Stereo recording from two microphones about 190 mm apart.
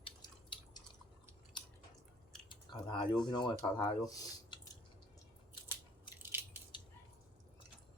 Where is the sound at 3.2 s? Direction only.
25° left (ahead or behind).